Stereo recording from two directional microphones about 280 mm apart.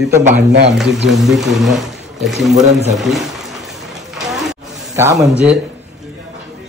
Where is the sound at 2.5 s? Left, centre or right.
Right.